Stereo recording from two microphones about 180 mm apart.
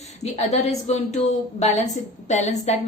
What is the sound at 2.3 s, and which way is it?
Speech, 40° left (ahead or behind).